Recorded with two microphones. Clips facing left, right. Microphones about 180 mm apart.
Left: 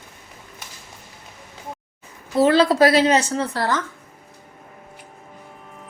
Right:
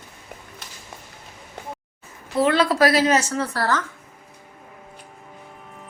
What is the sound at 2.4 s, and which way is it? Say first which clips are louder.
Speech: left 3 dB; 30° left (ahead or behind).